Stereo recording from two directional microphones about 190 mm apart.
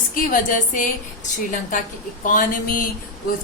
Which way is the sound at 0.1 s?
45° left (ahead or behind).